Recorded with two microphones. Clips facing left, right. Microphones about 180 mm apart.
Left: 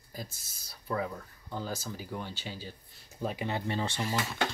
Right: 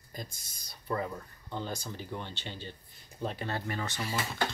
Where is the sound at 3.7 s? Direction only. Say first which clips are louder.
Left 3 dB; 25° left (ahead or behind).